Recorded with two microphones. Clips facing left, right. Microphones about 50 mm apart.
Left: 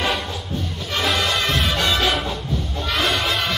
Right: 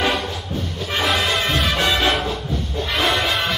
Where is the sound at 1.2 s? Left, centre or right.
Centre.